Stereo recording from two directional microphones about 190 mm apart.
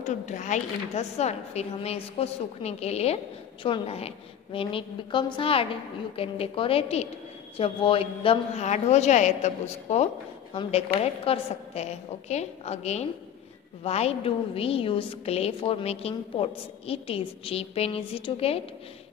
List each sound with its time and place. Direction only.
0.0 s a woman's voice: 40° left (ahead or behind)